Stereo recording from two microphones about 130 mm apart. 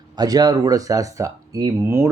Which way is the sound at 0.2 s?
30° right (ahead or behind).